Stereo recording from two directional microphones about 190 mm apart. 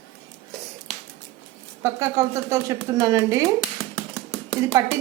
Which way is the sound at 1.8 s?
15° right (ahead or behind).